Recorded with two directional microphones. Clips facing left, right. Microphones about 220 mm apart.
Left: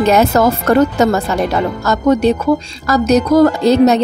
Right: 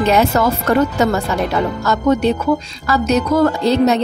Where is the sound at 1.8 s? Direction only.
40° left (ahead or behind).